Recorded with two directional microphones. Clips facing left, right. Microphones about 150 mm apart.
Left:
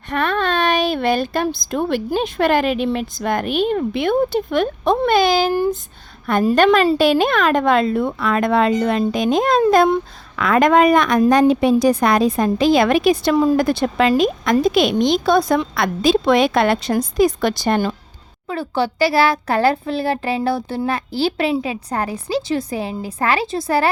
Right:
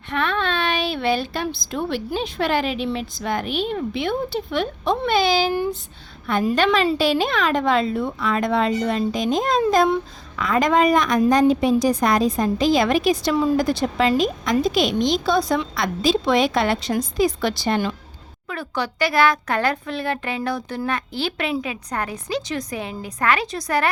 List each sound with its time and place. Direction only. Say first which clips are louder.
0.1 s a woman's voice: left 4 dB; 45° left (ahead or behind)
18.4 s a child's voice: left 6 dB; 30° left (ahead or behind)